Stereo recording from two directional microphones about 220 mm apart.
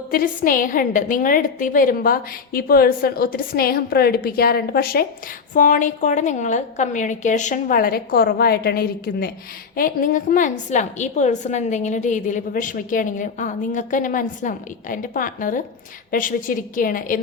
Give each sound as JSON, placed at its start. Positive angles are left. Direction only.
{"t": 0.1, "sound": "a woman's voice", "side_deg": 40}